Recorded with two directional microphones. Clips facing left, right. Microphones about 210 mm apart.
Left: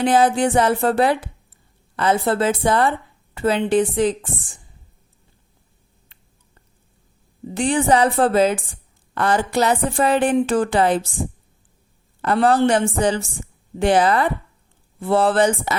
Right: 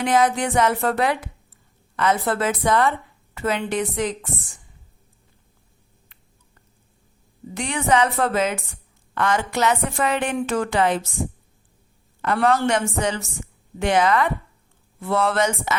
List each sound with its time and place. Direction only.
0.0 s a woman's voice: 30° left (ahead or behind)
7.5 s a woman's voice: 30° left (ahead or behind)
12.2 s a woman's voice: 35° left (ahead or behind)